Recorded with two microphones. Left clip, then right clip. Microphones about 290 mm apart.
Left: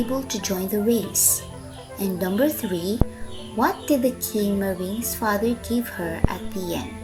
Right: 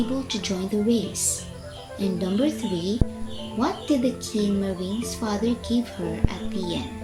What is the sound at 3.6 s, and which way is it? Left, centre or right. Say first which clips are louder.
Speech: left 3 dB; left.